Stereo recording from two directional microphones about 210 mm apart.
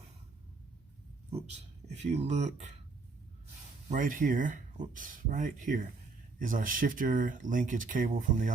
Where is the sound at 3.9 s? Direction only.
40° right (ahead or behind).